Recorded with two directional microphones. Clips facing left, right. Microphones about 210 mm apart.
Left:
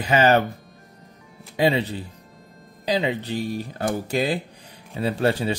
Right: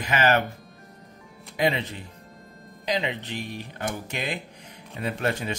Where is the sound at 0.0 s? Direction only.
35° left (ahead or behind).